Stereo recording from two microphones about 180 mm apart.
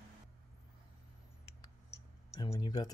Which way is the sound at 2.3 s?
20° left (ahead or behind).